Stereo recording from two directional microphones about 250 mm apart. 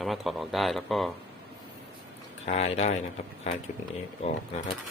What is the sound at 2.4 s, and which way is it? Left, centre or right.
Speech, left.